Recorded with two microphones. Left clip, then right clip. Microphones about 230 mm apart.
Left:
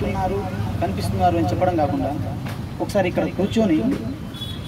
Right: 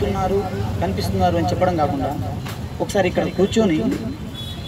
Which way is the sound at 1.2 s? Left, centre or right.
Right.